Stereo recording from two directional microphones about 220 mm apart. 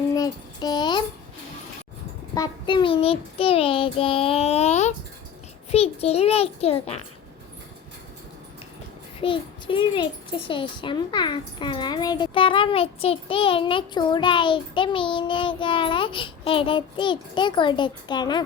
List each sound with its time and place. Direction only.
0.2 s child singing: 20° left (ahead or behind)
2.3 s a child's voice: 20° left (ahead or behind)
9.2 s a child's voice: 25° left (ahead or behind)